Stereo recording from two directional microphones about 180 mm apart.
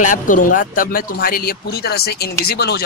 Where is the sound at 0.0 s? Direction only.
45° left (ahead or behind).